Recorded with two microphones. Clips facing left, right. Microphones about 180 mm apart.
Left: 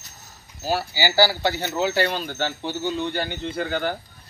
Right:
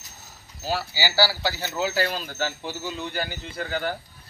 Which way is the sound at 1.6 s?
60° left (ahead or behind).